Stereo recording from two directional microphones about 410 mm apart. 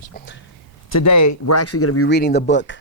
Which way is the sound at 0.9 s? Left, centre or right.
Left.